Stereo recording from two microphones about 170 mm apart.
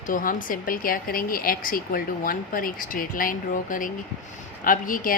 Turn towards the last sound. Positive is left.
turn(degrees=55)  # may be behind; listen again after turning